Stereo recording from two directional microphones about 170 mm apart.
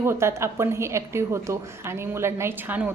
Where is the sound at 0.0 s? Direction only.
15° right (ahead or behind).